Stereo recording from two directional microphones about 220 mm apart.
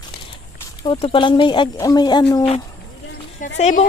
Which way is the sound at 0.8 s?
25° left (ahead or behind).